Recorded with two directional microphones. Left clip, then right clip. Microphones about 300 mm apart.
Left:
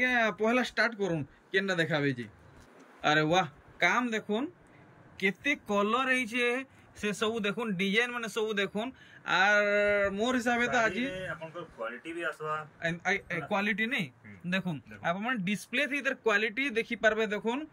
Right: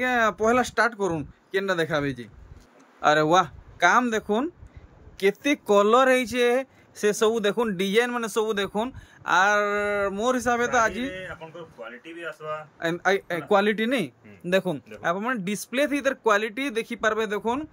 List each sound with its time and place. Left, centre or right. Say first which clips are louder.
0.0 s speech: right 5 dB; centre
12.0 s speech: right 1 dB; centre
12.7 s speech: right 10 dB; centre